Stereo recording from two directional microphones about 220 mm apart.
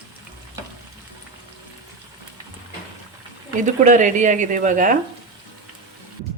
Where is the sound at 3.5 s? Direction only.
35° right (ahead or behind).